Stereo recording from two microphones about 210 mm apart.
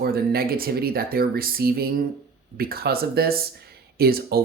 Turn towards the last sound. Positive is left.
turn(degrees=-45)  # may be behind; listen again after turning